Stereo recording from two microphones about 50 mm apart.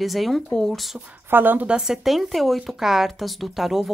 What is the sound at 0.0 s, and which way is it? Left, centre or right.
Speech, centre.